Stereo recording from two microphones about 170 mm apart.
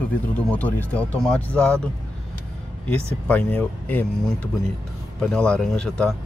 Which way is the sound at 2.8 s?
10° left (ahead or behind).